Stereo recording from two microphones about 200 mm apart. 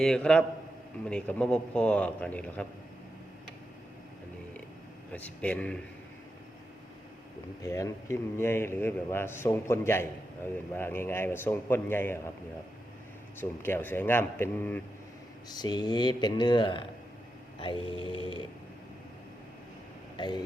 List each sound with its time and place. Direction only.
0.0 s a man's voice: 5° left (ahead or behind)
5.1 s a man's voice: 5° left (ahead or behind)
7.6 s a man's voice: 15° left (ahead or behind)
13.4 s a man's voice: 10° left (ahead or behind)
15.4 s speech: 20° left (ahead or behind)
20.1 s speech: 20° left (ahead or behind)